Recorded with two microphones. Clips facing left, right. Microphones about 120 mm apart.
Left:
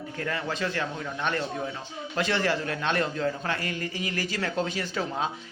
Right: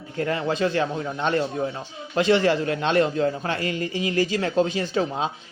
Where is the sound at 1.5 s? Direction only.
35° right (ahead or behind).